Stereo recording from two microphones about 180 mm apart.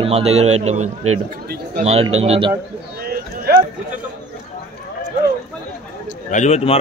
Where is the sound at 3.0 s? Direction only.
60° right (ahead or behind).